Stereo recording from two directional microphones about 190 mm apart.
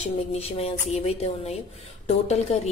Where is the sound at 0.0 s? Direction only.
35° left (ahead or behind).